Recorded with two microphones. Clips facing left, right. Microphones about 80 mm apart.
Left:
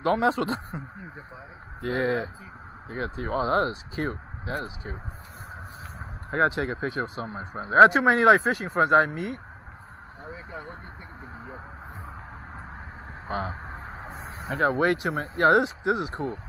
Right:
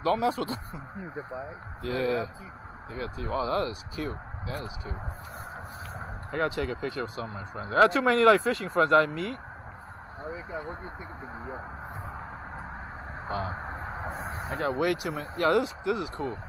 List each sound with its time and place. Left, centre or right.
0.0 s speech: left
6.5 s speech: left
13.7 s a sound: centre
14.6 s speech: left